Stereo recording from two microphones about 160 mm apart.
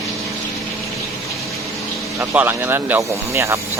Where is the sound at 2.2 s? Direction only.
15° right (ahead or behind).